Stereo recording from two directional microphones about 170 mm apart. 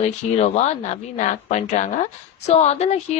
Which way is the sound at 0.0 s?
40° left (ahead or behind).